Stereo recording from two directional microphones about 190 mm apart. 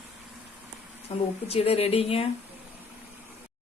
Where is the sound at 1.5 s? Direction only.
30° left (ahead or behind).